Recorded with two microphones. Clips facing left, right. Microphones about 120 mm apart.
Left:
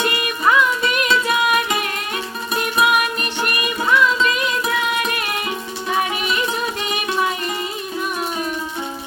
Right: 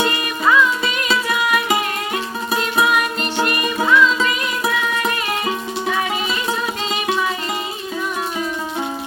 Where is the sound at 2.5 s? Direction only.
25° right (ahead or behind).